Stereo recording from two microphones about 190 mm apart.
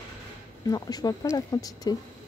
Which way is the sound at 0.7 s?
20° left (ahead or behind).